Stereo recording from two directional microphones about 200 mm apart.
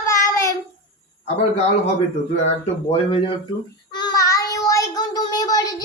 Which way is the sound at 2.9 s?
25° left (ahead or behind).